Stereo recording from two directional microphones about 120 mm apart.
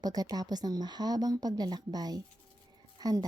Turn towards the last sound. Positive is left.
turn(degrees=-30)  # may be behind; listen again after turning